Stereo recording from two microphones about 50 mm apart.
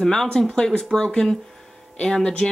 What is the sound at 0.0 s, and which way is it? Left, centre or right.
Speech, centre.